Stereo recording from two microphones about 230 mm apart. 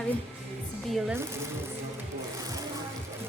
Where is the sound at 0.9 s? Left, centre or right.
Centre.